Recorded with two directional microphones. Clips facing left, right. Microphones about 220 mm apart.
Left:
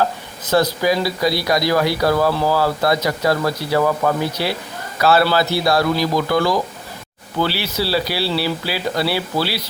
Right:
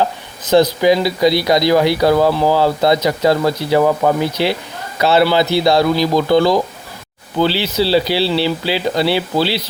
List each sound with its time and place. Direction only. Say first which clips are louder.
0.0 s speech: right 2 dB; 20° right (ahead or behind)